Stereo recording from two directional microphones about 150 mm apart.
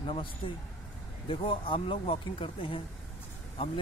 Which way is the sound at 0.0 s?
35° left (ahead or behind).